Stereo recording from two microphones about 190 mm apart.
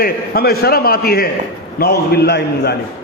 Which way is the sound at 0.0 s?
55° left (ahead or behind).